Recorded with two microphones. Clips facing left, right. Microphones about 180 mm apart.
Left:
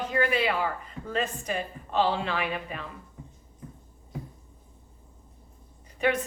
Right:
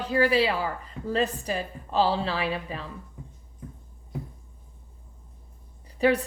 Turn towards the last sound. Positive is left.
turn(degrees=-35)  # may be behind; listen again after turning